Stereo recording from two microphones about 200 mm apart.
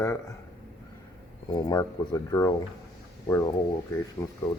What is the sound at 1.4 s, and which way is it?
Speech, 20° left (ahead or behind).